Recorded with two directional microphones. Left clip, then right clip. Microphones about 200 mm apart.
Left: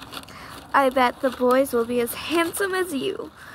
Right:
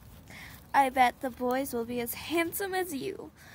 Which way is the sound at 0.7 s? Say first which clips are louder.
Left 5 dB; 60° right (ahead or behind).